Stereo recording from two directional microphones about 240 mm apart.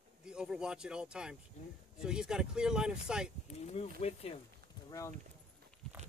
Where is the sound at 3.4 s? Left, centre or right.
Left.